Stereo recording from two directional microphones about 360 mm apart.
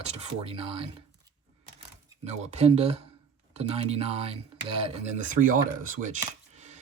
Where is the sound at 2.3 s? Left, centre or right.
Centre.